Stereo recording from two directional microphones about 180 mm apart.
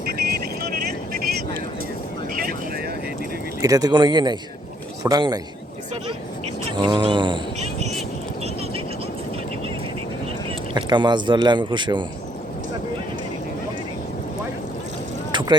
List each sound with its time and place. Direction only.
0.7 s vehicle: 55° right (ahead or behind)
3.6 s speech: 20° right (ahead or behind)
6.8 s speech: 25° right (ahead or behind)
10.5 s speech: 25° right (ahead or behind)
15.3 s a sound: 25° right (ahead or behind)